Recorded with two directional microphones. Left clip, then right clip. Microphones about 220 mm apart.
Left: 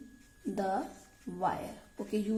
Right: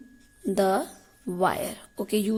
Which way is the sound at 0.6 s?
50° right (ahead or behind).